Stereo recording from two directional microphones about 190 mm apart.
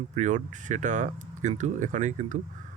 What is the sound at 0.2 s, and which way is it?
Speech, 40° right (ahead or behind).